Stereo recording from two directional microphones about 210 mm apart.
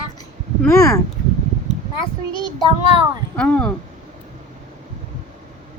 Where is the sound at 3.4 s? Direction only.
5° left (ahead or behind).